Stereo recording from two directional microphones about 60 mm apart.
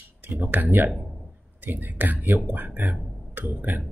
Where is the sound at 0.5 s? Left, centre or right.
Right.